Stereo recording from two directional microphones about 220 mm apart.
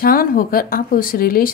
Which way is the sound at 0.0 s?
40° left (ahead or behind).